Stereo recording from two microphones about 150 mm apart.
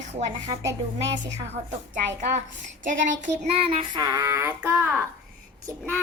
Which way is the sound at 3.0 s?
60° right (ahead or behind).